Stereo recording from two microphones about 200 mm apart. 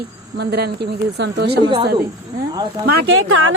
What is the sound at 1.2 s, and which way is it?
Speech, 55° right (ahead or behind).